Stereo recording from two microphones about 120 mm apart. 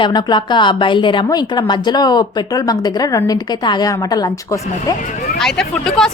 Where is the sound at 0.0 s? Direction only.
40° left (ahead or behind).